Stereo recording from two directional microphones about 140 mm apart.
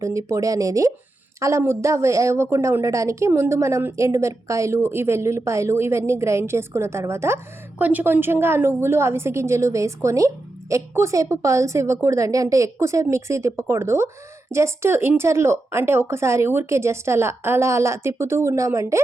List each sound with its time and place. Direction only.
0.0 s a woman's voice: 20° right (ahead or behind)